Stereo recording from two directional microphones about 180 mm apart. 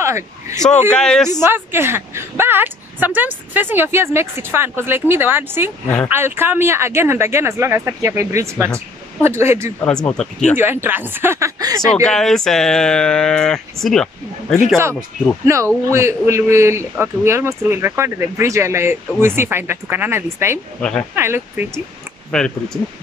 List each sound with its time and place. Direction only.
0.0 s speech: 15° right (ahead or behind)
0.9 s speech: 5° left (ahead or behind)
1.4 s speech: 10° right (ahead or behind)
9.8 s speech: 5° left (ahead or behind)
10.6 s speech: 10° right (ahead or behind)
12.1 s speech: centre (ahead or behind)
15.4 s speech: 15° right (ahead or behind)
22.3 s speech: 5° left (ahead or behind)